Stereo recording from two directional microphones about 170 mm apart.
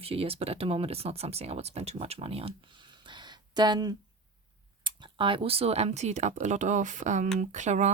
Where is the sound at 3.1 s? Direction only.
25° right (ahead or behind).